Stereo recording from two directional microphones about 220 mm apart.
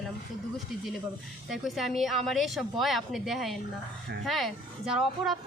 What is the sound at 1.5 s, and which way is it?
Speech, centre (ahead or behind).